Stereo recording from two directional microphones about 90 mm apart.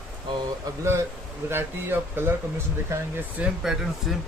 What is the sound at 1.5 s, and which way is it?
Speech, 25° right (ahead or behind).